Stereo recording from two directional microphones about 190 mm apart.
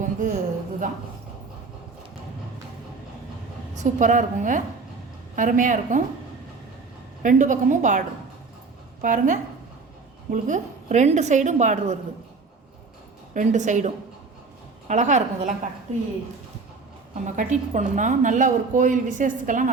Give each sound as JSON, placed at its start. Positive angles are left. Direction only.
{"t": 0.0, "sound": "a sound", "side_deg": -40}
{"t": 3.8, "sound": "a woman's voice", "side_deg": -40}
{"t": 7.2, "sound": "a woman's voice", "side_deg": -40}
{"t": 13.3, "sound": "a woman's voice", "side_deg": -40}
{"t": 17.3, "sound": "a woman's voice", "side_deg": -40}